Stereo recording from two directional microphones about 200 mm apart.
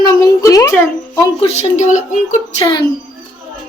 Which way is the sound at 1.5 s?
35° left (ahead or behind).